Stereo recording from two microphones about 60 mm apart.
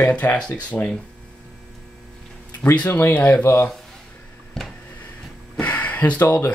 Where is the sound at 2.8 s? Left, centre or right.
Left.